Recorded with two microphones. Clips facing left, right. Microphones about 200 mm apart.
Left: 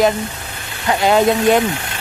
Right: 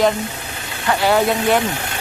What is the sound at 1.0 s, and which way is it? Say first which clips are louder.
Speech: left 4 dB; 20° left (ahead or behind).